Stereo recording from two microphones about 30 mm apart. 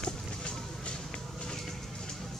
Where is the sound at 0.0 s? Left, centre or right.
Left.